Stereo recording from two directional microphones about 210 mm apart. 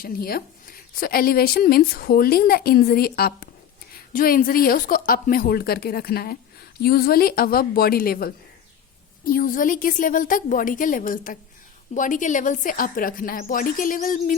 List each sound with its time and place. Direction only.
0.0 s speech: 45° left (ahead or behind)